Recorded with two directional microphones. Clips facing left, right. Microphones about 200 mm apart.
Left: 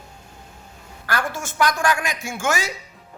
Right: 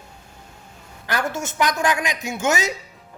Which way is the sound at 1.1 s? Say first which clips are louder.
Right 1 dB; 20° right (ahead or behind).